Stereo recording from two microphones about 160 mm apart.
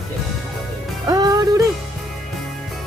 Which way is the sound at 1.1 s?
25° right (ahead or behind).